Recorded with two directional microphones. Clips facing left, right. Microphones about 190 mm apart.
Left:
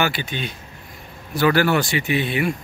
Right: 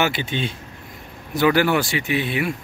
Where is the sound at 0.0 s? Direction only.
25° right (ahead or behind).